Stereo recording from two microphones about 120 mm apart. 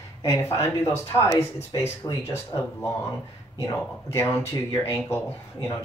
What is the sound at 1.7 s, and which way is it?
Speech, 35° left (ahead or behind).